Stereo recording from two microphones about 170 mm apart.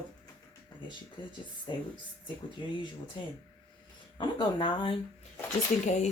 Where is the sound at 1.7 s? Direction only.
25° left (ahead or behind).